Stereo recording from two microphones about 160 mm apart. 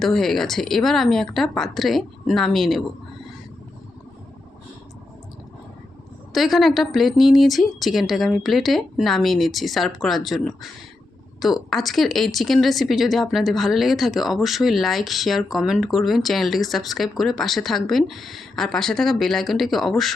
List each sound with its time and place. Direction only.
0.0 s speech: centre (ahead or behind)
6.3 s speech: centre (ahead or behind)